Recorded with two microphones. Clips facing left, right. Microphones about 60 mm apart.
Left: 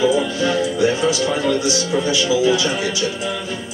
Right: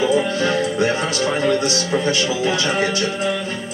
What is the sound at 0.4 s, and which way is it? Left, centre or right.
Music, right.